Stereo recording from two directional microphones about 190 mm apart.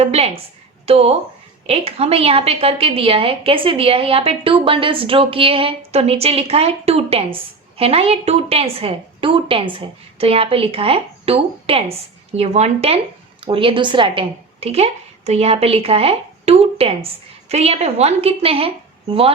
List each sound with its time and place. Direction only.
0.0 s a woman's voice: 30° right (ahead or behind)